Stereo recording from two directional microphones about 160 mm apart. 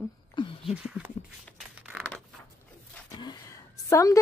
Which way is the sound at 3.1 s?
25° left (ahead or behind).